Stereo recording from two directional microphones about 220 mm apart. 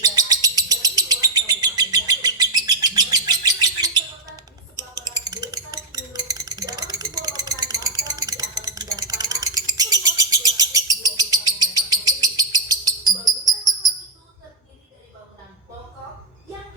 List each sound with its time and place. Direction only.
0.0 s bird: 15° right (ahead or behind)